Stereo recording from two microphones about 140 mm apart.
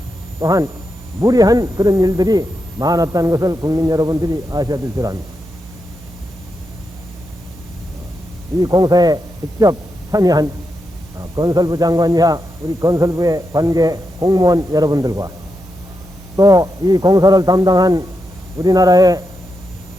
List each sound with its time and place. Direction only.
0.3 s a man's voice: 20° right (ahead or behind)
8.5 s a man's voice: 25° right (ahead or behind)
16.3 s a man's voice: 25° right (ahead or behind)